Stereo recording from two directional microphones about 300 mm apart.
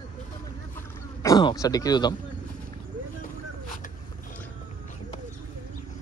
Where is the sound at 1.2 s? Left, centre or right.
Centre.